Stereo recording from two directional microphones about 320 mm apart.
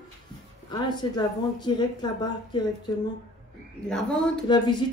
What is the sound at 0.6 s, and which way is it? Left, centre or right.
Speech, centre.